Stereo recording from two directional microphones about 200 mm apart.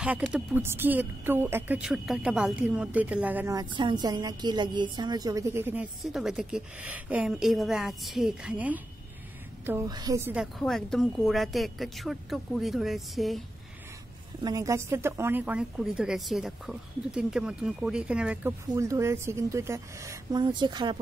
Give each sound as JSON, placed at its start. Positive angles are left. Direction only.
{"t": 0.0, "sound": "a woman's voice", "side_deg": -5}
{"t": 14.4, "sound": "a woman's voice", "side_deg": -15}